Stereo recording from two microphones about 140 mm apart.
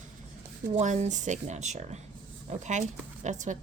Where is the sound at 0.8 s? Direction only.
60° right (ahead or behind).